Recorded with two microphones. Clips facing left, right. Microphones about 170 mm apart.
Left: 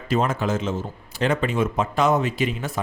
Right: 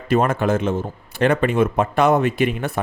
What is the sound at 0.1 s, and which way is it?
Speech, 55° right (ahead or behind).